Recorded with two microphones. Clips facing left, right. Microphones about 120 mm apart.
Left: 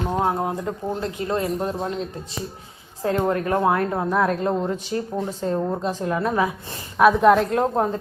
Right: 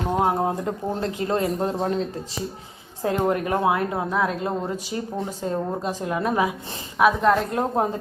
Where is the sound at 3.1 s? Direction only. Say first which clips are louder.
Left 1 dB; 20° right (ahead or behind); by 4.5 s centre (ahead or behind).